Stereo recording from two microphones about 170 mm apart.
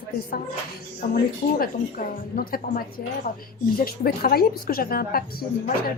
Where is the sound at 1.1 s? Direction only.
60° left (ahead or behind).